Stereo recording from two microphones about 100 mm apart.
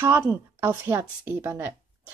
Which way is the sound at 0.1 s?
20° right (ahead or behind).